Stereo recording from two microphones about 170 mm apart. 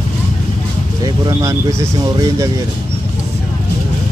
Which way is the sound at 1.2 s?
20° right (ahead or behind).